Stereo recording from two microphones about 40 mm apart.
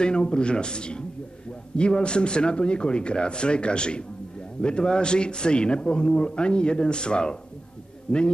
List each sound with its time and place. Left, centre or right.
0.0 s a man's voice: left